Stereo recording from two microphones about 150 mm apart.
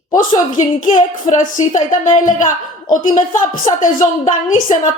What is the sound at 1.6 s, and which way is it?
A woman's voice, 55° left (ahead or behind).